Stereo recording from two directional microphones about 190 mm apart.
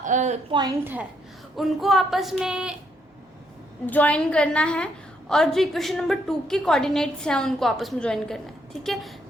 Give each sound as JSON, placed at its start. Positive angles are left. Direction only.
{"t": 0.0, "sound": "a woman's voice", "side_deg": -40}
{"t": 0.5, "sound": "a woman's voice", "side_deg": -20}
{"t": 1.5, "sound": "a woman's voice", "side_deg": 0}
{"t": 3.8, "sound": "a woman's voice", "side_deg": 10}